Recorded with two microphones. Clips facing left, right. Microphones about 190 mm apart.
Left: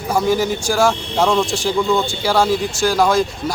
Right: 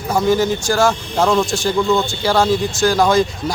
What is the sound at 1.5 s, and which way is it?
Speech, 10° left (ahead or behind).